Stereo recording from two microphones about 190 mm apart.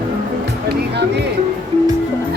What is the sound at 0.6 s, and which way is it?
Music, 60° right (ahead or behind).